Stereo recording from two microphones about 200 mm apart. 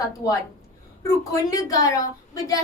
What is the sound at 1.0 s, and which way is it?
A woman's voice, 15° left (ahead or behind).